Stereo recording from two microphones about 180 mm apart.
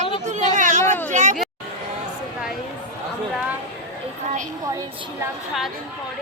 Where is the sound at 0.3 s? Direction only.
40° right (ahead or behind).